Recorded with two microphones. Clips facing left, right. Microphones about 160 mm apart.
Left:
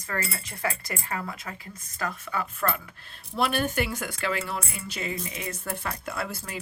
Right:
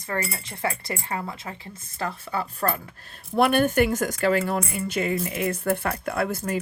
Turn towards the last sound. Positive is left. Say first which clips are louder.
# right 8 dB
turn(degrees=-50)  # may be behind; listen again after turning